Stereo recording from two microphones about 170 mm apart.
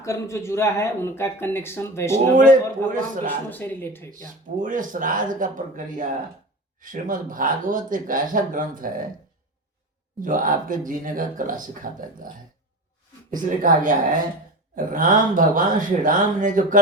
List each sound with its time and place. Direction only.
0.0 s speech: 15° left (ahead or behind)
2.3 s speech: 55° right (ahead or behind)
3.2 s speech: 10° left (ahead or behind)
4.4 s speech: 50° right (ahead or behind)
10.2 s speech: 50° right (ahead or behind)
13.6 s speech: 50° right (ahead or behind)